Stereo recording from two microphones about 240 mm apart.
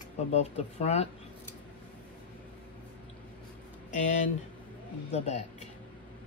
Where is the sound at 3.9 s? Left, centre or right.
Left.